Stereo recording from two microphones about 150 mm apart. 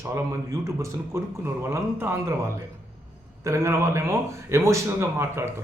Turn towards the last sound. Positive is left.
turn(degrees=-20)  # may be behind; listen again after turning